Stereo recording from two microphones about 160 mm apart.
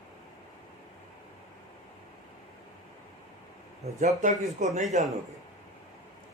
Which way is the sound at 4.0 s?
50° right (ahead or behind).